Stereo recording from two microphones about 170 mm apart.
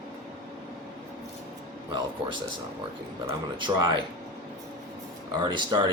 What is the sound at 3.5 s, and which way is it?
Speech, 25° right (ahead or behind).